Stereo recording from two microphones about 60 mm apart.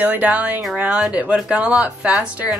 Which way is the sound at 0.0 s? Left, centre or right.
Right.